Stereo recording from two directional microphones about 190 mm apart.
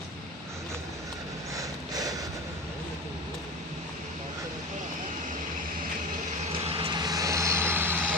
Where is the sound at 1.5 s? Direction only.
20° right (ahead or behind).